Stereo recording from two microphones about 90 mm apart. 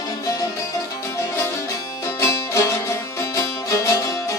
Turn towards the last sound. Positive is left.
turn(degrees=35)  # may be behind; listen again after turning